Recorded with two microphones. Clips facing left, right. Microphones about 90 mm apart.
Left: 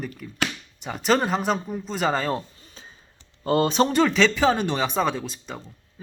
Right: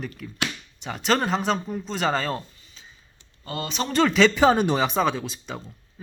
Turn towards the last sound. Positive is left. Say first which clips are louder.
# even
turn(degrees=0)  # may be behind; listen again after turning